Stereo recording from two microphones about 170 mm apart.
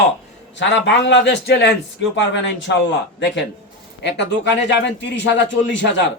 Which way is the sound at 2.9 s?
90° left.